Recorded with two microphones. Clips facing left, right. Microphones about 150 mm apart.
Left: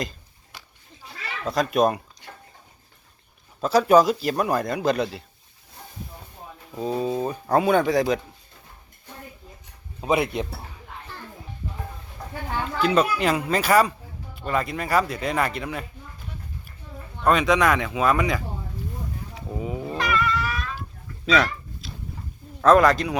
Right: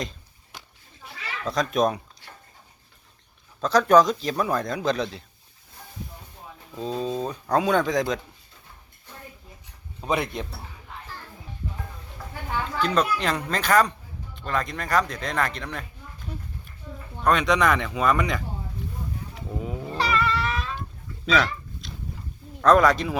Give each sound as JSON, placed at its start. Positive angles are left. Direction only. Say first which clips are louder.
{"t": 1.5, "sound": "speech", "louder": "left 2 dB", "side_deg": 5}
{"t": 3.6, "sound": "speech", "louder": "left 1 dB", "side_deg": 5}
{"t": 6.7, "sound": "speech", "louder": "left 3 dB", "side_deg": 10}
{"t": 10.0, "sound": "speech", "louder": "left 4 dB", "side_deg": 10}
{"t": 12.8, "sound": "speech", "louder": "left 3 dB", "side_deg": 5}
{"t": 17.2, "sound": "speech", "louder": "left 2 dB", "side_deg": 5}
{"t": 19.3, "sound": "a sound", "louder": "left 3 dB", "side_deg": 0}
{"t": 20.0, "sound": "cat", "louder": "right 1 dB", "side_deg": -30}
{"t": 21.2, "sound": "a sound", "louder": "left 2 dB", "side_deg": 0}
{"t": 22.6, "sound": "speech", "louder": "left 1 dB", "side_deg": 0}